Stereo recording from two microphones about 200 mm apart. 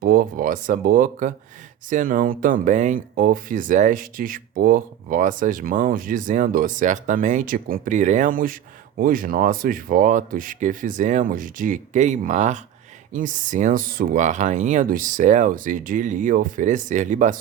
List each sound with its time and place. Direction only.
0.0 s speech: 45° right (ahead or behind)